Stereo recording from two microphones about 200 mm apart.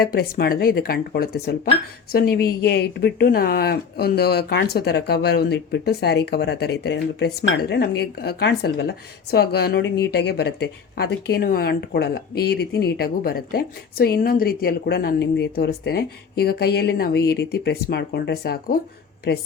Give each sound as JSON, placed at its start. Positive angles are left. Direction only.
{"t": 0.0, "sound": "speech", "side_deg": 50}